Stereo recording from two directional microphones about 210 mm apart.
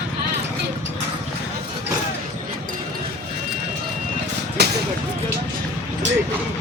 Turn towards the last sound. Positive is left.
turn(degrees=-50)  # may be behind; listen again after turning